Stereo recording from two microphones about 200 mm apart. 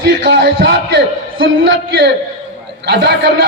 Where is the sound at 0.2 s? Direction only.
60° right (ahead or behind).